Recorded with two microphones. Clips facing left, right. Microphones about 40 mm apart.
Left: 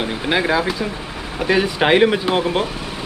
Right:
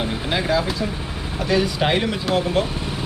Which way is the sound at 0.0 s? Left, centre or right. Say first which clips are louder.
Left 4 dB; left.